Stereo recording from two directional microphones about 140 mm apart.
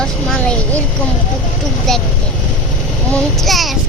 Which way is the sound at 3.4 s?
Centre (ahead or behind).